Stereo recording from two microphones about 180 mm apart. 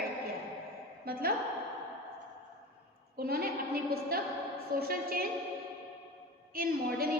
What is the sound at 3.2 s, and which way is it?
A woman's voice, 55° right (ahead or behind).